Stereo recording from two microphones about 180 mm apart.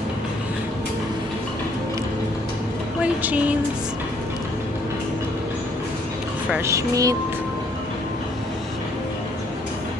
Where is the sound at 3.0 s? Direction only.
10° right (ahead or behind).